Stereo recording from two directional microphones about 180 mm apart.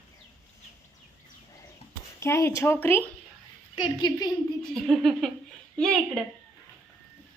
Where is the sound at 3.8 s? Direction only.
25° left (ahead or behind).